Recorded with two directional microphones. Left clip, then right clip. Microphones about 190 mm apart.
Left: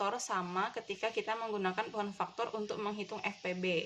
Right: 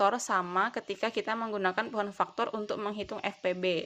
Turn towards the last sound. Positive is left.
turn(degrees=-45)  # may be behind; listen again after turning